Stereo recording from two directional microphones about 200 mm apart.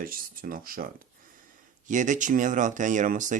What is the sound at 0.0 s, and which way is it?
Speech, 45° right (ahead or behind).